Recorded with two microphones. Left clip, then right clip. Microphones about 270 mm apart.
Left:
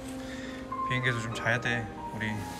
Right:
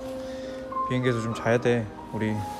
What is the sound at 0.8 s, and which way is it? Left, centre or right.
Speech, centre.